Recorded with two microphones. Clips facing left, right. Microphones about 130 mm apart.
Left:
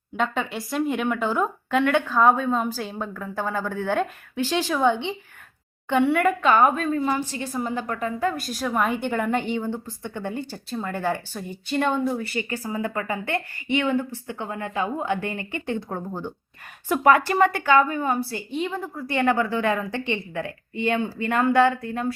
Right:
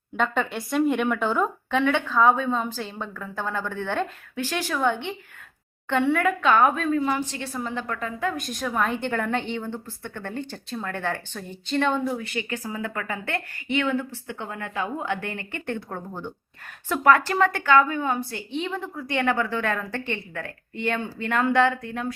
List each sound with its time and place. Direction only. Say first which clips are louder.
0.2 s a woman's voice: right 1 dB; centre (ahead or behind); by 5.1 s 15° left (ahead or behind)
5.9 s a woman's voice: left 2 dB; 5° left (ahead or behind)